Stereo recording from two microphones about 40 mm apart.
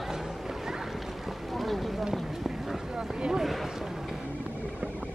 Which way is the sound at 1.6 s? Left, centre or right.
Centre.